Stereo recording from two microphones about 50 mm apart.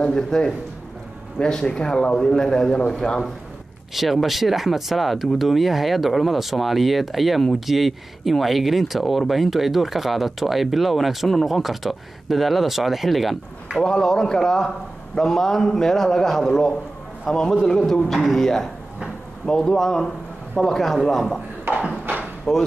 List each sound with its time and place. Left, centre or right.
0.0 s a man's voice: centre
3.9 s speech: centre
13.7 s a man's voice: centre
21.7 s a sound: right
22.5 s a man's voice: centre